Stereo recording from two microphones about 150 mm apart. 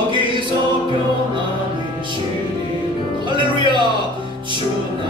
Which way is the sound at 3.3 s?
30° right (ahead or behind).